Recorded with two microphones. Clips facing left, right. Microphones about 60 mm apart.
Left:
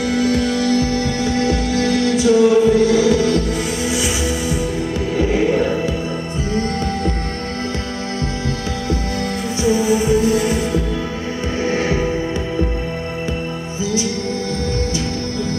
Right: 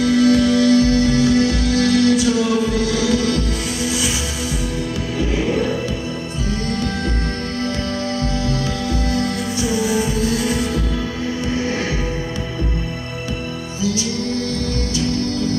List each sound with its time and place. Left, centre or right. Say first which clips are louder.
0.0 s music: right 3 dB; left
5.1 s music: left 4 dB; left
9.6 s music: left 4 dB; left